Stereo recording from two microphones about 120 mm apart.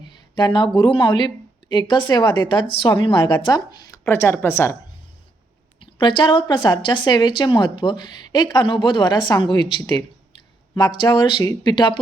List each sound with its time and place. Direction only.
0.3 s a woman's voice: 40° left (ahead or behind); by 4.8 s 20° left (ahead or behind)
5.8 s a woman's voice: 45° left (ahead or behind)